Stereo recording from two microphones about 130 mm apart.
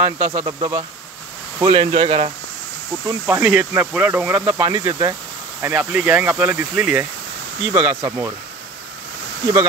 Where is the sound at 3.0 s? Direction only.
15° right (ahead or behind).